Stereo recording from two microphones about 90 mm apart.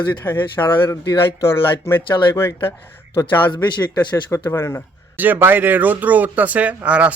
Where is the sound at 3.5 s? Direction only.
55° left (ahead or behind).